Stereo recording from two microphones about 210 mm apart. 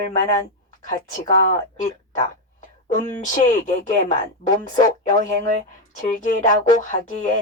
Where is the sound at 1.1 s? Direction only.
40° left (ahead or behind).